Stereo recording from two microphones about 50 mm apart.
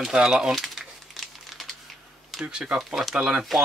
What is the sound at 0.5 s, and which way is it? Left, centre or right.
Crumpling, centre.